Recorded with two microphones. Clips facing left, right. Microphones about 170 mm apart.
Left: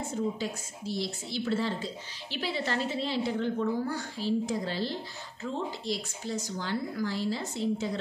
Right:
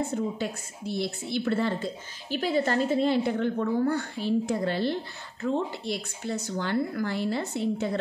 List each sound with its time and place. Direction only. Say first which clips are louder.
0.1 s a woman's voice: right 2 dB; 60° right (ahead or behind)